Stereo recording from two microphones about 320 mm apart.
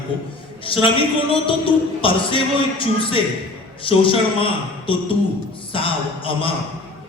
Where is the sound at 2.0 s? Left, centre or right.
Centre.